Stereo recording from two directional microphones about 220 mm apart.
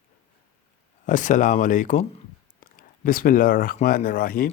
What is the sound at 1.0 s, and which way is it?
Speech, 35° left (ahead or behind).